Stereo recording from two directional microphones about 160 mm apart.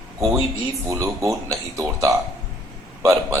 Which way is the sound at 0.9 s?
20° right (ahead or behind).